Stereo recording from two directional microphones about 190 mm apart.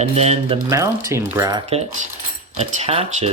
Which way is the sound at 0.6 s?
15° right (ahead or behind).